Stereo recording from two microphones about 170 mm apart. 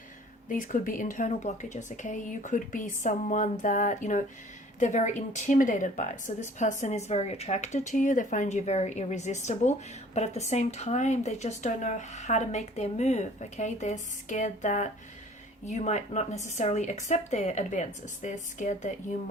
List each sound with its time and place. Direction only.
0.4 s speech: 50° left (ahead or behind)